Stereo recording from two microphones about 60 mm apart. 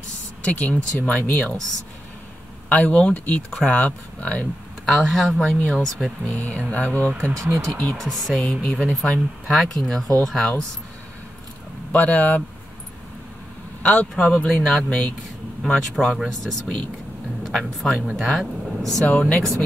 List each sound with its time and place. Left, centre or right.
0.4 s speech: left
2.7 s speech: left
4.8 s speech: centre
6.2 s speech: left
7.1 s speech: right
7.3 s speech: right
8.0 s speech: centre
9.5 s speech: centre
11.9 s speech: left
13.8 s speech: centre
19.0 s speech: left